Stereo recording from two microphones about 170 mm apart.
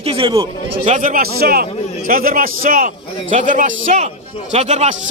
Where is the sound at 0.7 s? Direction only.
45° right (ahead or behind).